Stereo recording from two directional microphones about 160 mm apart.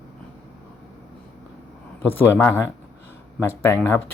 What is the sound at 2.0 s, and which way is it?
Speech, 15° left (ahead or behind).